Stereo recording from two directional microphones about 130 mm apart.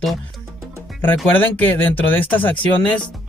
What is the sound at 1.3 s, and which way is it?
Speech, 15° left (ahead or behind).